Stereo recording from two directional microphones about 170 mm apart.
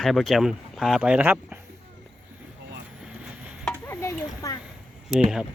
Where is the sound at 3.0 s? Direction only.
5° right (ahead or behind).